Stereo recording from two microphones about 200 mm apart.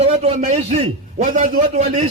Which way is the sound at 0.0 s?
30° right (ahead or behind).